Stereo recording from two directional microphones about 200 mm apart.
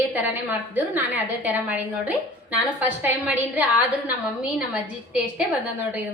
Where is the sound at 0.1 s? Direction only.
10° right (ahead or behind).